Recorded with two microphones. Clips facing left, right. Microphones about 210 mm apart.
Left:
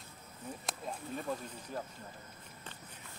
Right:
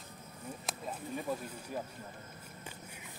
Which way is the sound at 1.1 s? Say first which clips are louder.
Right 2 dB; 15° right (ahead or behind).